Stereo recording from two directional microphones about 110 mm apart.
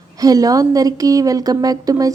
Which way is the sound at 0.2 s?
35° right (ahead or behind).